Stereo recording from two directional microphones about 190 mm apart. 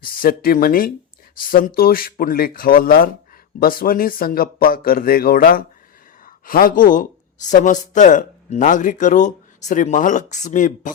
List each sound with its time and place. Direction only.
0.0 s speech: 50° left (ahead or behind)